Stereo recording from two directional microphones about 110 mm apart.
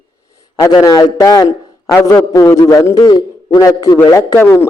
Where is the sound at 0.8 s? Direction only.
35° left (ahead or behind).